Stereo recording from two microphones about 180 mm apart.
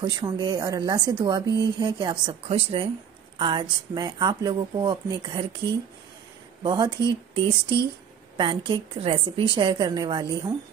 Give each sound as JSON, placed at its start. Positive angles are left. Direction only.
{"t": 0.0, "sound": "speech", "side_deg": -25}
{"t": 6.6, "sound": "speech", "side_deg": -25}